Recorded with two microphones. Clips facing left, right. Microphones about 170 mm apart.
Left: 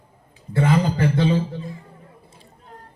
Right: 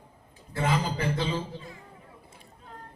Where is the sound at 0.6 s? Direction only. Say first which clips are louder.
Left 8 dB; 60° left (ahead or behind).